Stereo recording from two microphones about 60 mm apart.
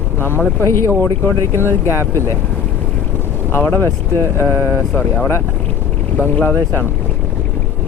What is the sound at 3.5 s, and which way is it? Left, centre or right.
Speech, left.